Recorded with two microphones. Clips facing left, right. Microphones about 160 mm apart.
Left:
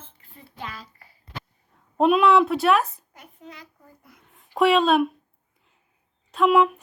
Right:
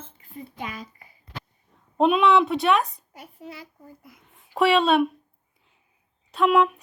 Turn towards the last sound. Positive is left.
turn(degrees=0)  # may be behind; listen again after turning